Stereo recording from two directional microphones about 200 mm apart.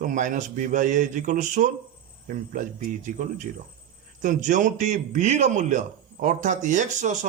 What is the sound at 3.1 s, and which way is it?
A man's voice, 40° right (ahead or behind).